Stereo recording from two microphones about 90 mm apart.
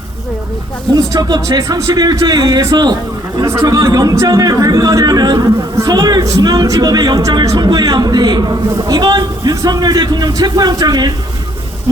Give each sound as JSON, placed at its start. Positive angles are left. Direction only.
{"t": 0.9, "sound": "speech", "side_deg": -45}
{"t": 3.4, "sound": "speech", "side_deg": -30}